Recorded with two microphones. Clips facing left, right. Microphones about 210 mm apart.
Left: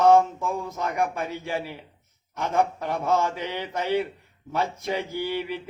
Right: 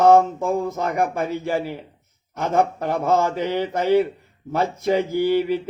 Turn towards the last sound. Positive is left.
turn(degrees=-45)  # may be behind; listen again after turning